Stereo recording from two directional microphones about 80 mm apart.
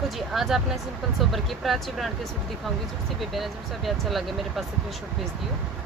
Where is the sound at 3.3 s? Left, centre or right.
Centre.